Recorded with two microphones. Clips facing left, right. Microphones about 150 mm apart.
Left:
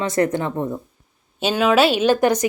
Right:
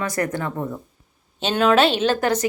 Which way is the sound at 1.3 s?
5° left (ahead or behind).